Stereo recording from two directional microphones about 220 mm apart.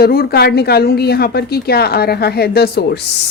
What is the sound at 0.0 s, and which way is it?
Speech, 45° left (ahead or behind).